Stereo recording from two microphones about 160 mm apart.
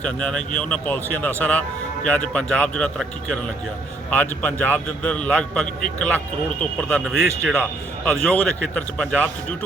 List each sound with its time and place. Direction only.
0.0 s a man's voice: 5° left (ahead or behind)
7.6 s a man's voice: 10° left (ahead or behind)